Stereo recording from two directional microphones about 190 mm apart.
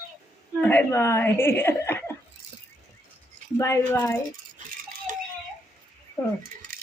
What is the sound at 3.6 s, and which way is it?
Speech, 15° left (ahead or behind).